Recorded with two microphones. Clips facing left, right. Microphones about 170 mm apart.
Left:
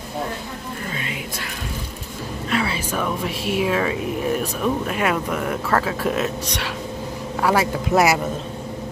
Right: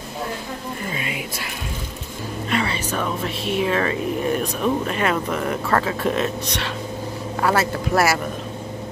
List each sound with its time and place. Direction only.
2.5 s speech: 5° left (ahead or behind)